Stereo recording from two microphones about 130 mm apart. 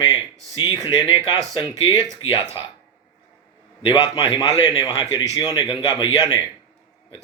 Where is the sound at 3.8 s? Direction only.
35° left (ahead or behind).